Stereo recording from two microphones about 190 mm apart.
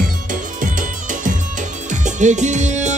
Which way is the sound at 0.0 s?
45° right (ahead or behind).